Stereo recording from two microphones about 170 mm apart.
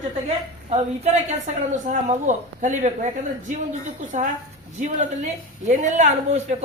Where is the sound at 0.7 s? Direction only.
40° right (ahead or behind).